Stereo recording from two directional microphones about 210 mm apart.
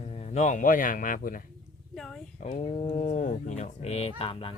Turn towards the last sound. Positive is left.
turn(degrees=25)  # may be behind; listen again after turning